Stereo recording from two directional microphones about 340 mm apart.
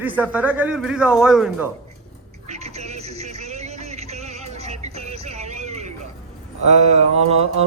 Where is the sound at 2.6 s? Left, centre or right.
Centre.